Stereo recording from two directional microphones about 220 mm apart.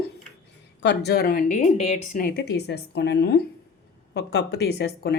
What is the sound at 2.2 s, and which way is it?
A woman's voice, 50° left (ahead or behind).